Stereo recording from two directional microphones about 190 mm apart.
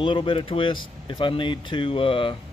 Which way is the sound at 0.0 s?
25° left (ahead or behind).